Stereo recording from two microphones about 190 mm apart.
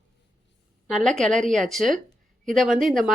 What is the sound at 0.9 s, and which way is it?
Speech, centre (ahead or behind).